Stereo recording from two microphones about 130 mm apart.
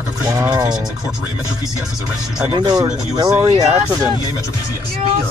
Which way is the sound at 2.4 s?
35° right (ahead or behind).